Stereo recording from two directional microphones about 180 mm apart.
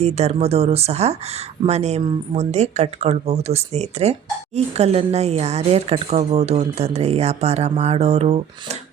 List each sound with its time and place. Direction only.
0.0 s speech: 35° right (ahead or behind)